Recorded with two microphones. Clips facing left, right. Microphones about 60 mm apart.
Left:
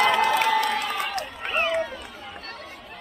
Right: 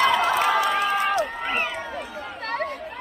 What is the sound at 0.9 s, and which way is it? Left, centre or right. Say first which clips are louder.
Run: right 6 dB; right.